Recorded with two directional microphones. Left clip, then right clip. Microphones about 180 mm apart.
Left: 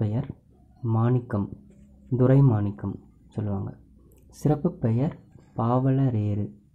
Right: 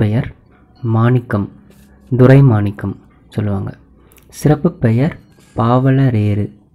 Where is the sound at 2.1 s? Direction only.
25° right (ahead or behind).